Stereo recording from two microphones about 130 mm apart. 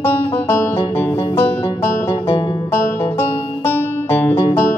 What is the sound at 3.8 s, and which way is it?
Music, 15° left (ahead or behind).